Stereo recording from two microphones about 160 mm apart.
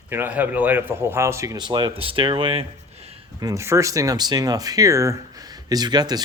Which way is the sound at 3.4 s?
20° right (ahead or behind).